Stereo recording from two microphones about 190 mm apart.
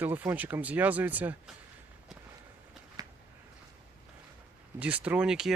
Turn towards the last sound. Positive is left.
turn(degrees=-5)  # may be behind; listen again after turning